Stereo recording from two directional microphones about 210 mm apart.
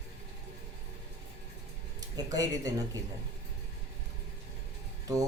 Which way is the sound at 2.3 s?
15° right (ahead or behind).